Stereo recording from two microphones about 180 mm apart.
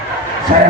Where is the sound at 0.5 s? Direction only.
50° right (ahead or behind).